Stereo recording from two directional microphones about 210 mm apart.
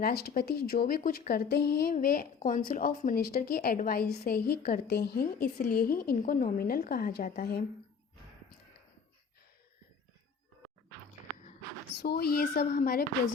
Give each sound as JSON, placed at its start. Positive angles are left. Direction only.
{"t": 0.0, "sound": "speech", "side_deg": 50}
{"t": 11.9, "sound": "speech", "side_deg": 50}